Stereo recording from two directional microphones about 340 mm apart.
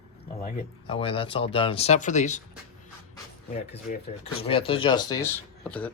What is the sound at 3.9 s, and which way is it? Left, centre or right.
Speech, left.